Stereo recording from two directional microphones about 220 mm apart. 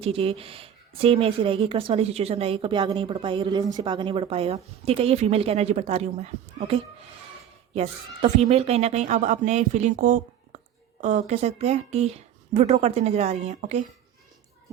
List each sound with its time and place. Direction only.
0.0 s a woman's voice: 25° right (ahead or behind)